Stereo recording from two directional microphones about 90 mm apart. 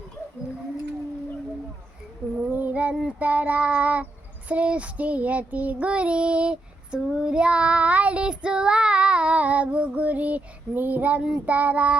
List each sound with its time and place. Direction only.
2.4 s child singing: 20° right (ahead or behind)